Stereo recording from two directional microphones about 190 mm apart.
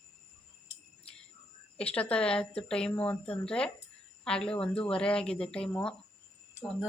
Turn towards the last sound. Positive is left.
turn(degrees=5)  # may be behind; listen again after turning